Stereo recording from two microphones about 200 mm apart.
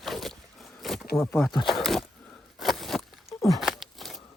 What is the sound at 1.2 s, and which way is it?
Speech, 5° left (ahead or behind).